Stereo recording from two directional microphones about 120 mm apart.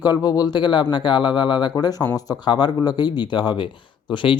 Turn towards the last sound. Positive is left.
turn(degrees=45)  # may be behind; listen again after turning